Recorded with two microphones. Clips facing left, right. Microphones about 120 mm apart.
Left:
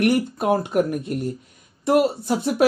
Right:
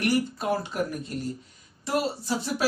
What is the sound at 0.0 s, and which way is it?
Speech, 55° left (ahead or behind).